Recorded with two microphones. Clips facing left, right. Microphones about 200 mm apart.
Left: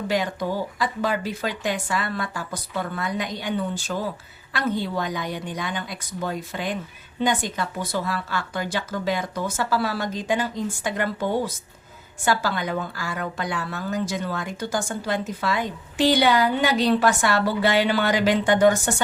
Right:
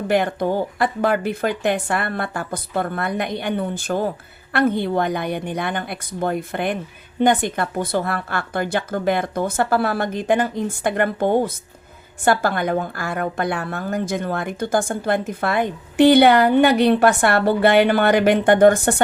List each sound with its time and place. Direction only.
0.1 s a woman's voice: 60° right (ahead or behind)